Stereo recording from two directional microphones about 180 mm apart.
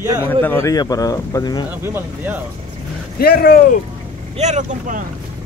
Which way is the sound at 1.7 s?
10° right (ahead or behind).